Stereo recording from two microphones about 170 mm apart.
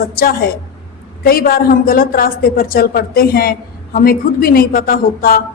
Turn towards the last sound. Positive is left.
turn(degrees=60)  # may be behind; listen again after turning